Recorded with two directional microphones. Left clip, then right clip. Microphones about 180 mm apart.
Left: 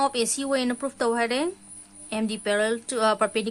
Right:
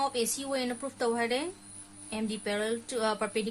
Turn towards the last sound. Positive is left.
turn(degrees=50)  # may be behind; listen again after turning